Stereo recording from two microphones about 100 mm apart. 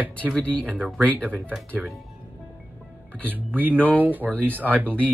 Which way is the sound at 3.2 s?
20° right (ahead or behind).